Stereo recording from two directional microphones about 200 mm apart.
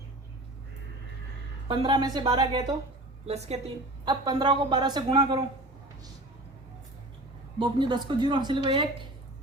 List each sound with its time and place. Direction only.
1.6 s a woman's voice: 25° right (ahead or behind)
3.2 s a woman's voice: 35° right (ahead or behind)
4.0 s a woman's voice: 20° right (ahead or behind)
7.6 s a woman's voice: 25° right (ahead or behind)